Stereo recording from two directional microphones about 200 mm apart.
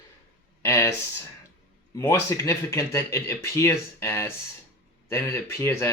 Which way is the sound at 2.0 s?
15° left (ahead or behind).